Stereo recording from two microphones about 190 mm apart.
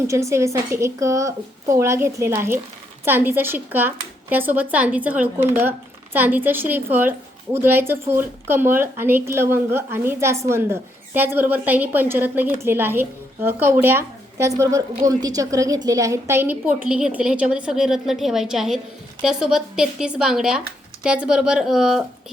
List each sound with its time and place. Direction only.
0.1 s a woman's voice: 15° right (ahead or behind)